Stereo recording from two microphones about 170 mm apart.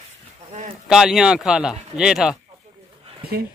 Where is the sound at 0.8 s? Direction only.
5° right (ahead or behind).